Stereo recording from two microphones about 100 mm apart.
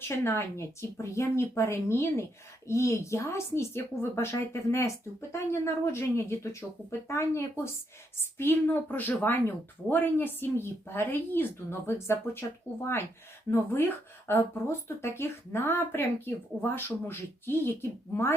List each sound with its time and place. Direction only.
0.3 s speech: 25° left (ahead or behind)